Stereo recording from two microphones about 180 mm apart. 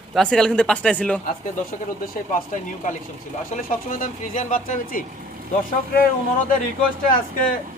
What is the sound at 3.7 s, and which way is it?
Speech, 50° left (ahead or behind).